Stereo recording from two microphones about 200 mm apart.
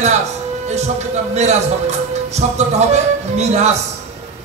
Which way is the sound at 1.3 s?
35° right (ahead or behind).